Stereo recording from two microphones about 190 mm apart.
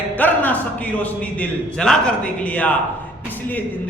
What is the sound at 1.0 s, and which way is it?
A man's voice, 5° left (ahead or behind).